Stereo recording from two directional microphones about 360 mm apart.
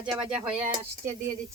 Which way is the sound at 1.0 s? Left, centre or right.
Centre.